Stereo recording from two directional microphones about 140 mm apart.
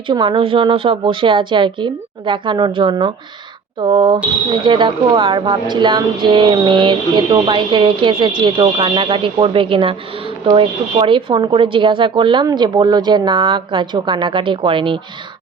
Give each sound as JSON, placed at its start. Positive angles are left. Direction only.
{"t": 0.1, "sound": "speech", "side_deg": -35}